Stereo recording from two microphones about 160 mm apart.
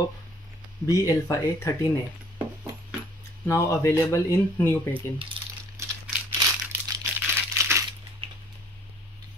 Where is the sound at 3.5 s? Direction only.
15° left (ahead or behind).